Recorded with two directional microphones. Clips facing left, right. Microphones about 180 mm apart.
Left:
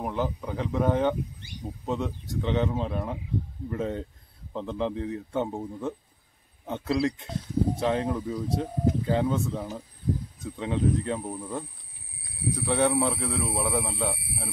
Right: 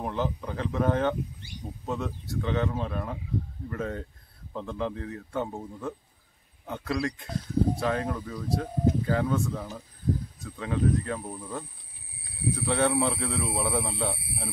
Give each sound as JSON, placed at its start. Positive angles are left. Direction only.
{"t": 0.0, "sound": "speech", "side_deg": 10}